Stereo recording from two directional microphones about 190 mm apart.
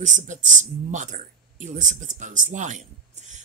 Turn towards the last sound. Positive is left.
turn(degrees=-40)  # may be behind; listen again after turning